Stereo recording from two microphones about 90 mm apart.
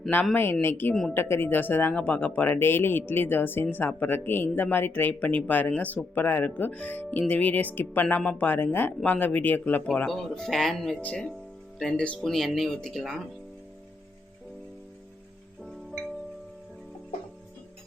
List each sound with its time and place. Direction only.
0.6 s speech: 25° left (ahead or behind)
10.1 s speech: 5° left (ahead or behind)